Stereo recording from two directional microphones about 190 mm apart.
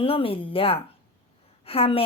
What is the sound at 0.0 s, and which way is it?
A woman's voice, 30° left (ahead or behind).